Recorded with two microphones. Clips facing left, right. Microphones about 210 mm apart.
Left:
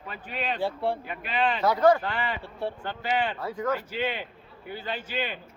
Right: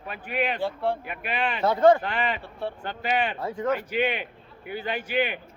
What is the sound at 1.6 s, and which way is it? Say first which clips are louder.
Speech: right 3 dB; 25° right (ahead or behind).